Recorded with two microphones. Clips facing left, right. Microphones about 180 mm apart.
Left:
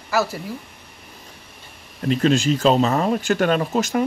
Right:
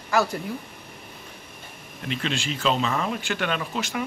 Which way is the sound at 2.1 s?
40° left (ahead or behind).